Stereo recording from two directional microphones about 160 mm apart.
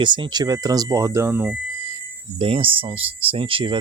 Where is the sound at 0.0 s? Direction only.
30° right (ahead or behind); by 1.5 s 15° right (ahead or behind).